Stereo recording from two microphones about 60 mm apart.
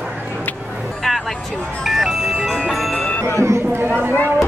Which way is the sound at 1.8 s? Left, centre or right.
Centre.